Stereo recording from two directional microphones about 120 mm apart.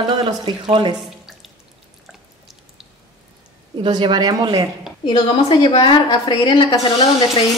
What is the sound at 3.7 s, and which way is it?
Speech, 40° right (ahead or behind).